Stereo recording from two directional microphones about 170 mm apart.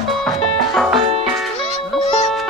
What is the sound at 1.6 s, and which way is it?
Music, 45° left (ahead or behind).